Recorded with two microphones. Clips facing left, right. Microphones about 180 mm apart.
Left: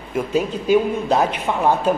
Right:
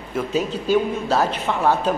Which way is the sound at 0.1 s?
10° left (ahead or behind).